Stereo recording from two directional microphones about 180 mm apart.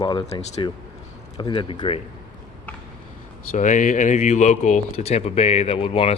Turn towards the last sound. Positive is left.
turn(degrees=30)  # may be behind; listen again after turning